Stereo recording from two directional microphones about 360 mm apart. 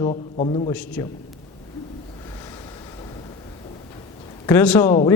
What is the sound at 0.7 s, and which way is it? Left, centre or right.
Speech, centre.